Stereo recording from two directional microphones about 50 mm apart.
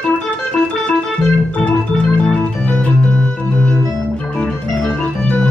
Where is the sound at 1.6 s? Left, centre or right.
Left.